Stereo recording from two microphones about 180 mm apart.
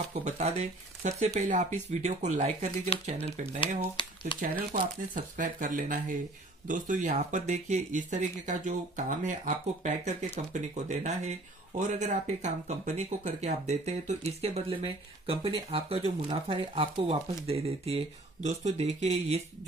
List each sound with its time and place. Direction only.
0.1 s speech: 35° right (ahead or behind)
4.7 s speech: 45° right (ahead or behind)